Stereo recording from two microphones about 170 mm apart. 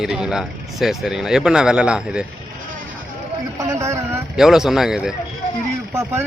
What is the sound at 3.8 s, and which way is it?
Speech, 15° right (ahead or behind).